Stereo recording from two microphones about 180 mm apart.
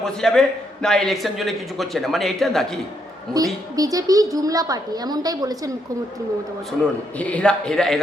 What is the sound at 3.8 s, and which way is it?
A woman's voice, 20° right (ahead or behind).